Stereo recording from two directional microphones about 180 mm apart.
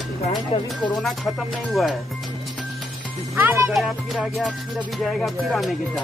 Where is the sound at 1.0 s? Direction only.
Centre (ahead or behind).